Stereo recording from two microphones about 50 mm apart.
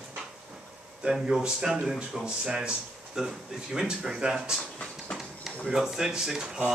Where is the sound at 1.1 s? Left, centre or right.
Centre.